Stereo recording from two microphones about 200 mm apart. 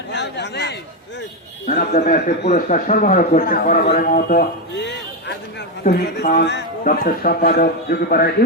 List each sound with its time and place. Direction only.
0.1 s speech: 60° left (ahead or behind)
1.6 s a man's voice: 40° left (ahead or behind)
5.8 s a man's voice: 35° left (ahead or behind)
6.2 s speech: 55° left (ahead or behind)
6.8 s a man's voice: 45° left (ahead or behind)